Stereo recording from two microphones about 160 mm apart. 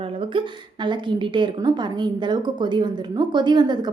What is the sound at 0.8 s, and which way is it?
A woman's voice, 30° right (ahead or behind).